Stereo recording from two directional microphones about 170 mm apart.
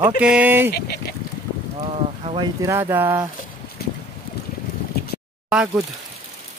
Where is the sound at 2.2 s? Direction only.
35° right (ahead or behind).